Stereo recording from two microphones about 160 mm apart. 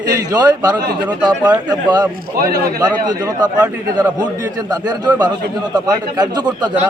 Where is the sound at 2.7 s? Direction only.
25° right (ahead or behind).